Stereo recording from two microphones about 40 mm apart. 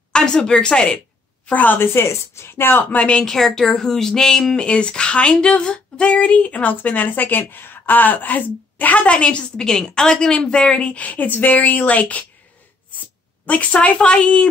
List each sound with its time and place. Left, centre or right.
0.1 s a woman's voice: left
1.5 s a woman's voice: left
1.8 s speech: left
3.3 s speech: centre
4.6 s speech: left
9.0 s a woman's voice: left
9.8 s speech: centre; by 12.3 s left
13.5 s speech: left
13.9 s a woman's voice: left